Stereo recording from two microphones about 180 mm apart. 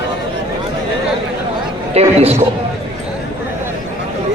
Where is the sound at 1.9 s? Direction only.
35° right (ahead or behind).